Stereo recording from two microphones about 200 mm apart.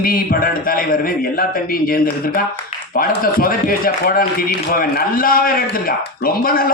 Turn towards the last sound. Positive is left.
turn(degrees=45)  # may be behind; listen again after turning